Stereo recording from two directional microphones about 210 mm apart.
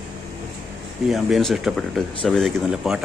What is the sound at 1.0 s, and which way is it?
Speech, centre (ahead or behind).